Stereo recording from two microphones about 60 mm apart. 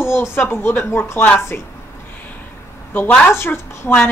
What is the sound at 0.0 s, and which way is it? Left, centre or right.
Speech, left.